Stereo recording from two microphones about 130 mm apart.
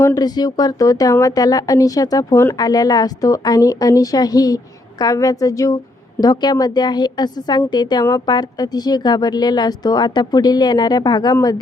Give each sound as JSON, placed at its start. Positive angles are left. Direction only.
{"t": 0.0, "sound": "a woman's voice", "side_deg": 30}